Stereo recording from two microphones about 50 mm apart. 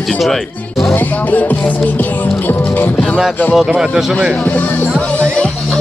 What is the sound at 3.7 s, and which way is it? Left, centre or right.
Speech, centre.